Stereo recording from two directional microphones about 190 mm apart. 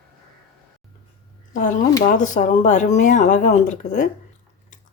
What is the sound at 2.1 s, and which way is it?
Speech, 40° left (ahead or behind).